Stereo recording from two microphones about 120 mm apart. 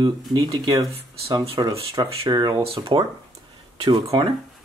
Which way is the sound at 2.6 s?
50° right (ahead or behind).